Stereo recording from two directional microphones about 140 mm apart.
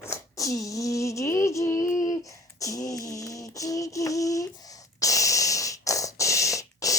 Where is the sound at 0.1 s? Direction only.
25° left (ahead or behind).